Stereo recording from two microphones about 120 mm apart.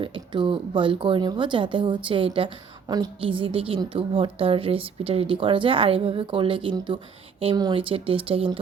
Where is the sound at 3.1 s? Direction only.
50° right (ahead or behind).